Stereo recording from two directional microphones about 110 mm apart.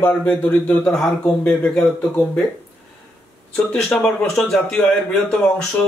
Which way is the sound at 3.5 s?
10° left (ahead or behind).